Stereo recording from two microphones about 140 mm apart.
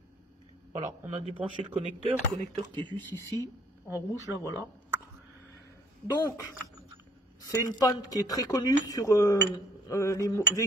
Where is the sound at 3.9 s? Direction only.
25° right (ahead or behind).